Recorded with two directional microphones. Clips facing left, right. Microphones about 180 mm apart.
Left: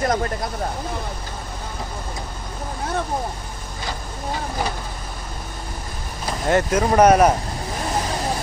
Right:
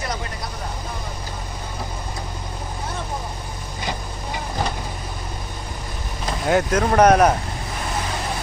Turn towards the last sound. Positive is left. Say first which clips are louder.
# left 1 dB
turn(degrees=5)  # may be behind; listen again after turning